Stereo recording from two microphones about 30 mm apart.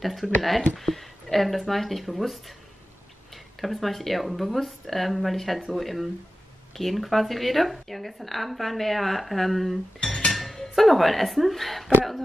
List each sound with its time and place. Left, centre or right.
0.0 s speech: centre
3.6 s speech: centre
10.0 s music: left
10.3 s speech: centre